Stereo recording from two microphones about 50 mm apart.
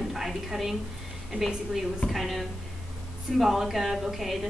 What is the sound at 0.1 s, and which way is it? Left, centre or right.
Speech, centre.